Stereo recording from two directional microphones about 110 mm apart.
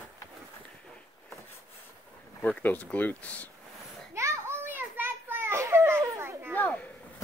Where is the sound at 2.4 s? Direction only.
15° left (ahead or behind).